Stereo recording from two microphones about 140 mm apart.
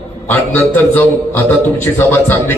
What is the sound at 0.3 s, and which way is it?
A man's voice, 15° left (ahead or behind).